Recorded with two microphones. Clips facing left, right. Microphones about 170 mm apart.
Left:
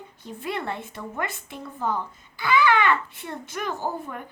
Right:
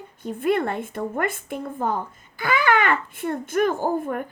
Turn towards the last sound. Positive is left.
turn(degrees=-50)  # may be behind; listen again after turning